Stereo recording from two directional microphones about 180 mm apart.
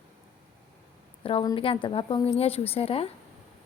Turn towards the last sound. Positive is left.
turn(degrees=30)  # may be behind; listen again after turning